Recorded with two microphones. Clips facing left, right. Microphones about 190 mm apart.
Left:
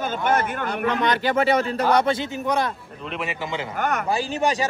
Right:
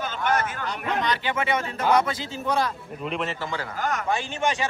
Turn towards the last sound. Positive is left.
turn(degrees=35)  # may be behind; listen again after turning